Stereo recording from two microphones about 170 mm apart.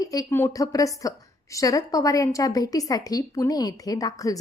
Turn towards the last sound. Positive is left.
turn(degrees=20)  # may be behind; listen again after turning